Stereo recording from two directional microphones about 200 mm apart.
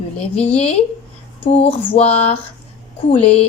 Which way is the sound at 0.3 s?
30° left (ahead or behind).